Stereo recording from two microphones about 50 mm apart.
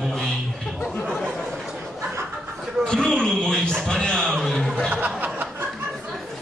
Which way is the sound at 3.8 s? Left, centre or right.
Centre.